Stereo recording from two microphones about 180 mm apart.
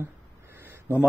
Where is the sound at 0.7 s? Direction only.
10° right (ahead or behind).